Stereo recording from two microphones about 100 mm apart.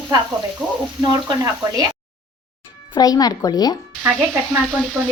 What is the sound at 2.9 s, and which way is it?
Speech, 40° left (ahead or behind).